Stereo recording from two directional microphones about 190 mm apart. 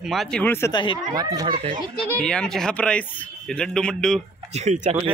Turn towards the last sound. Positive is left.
turn(degrees=-40)  # may be behind; listen again after turning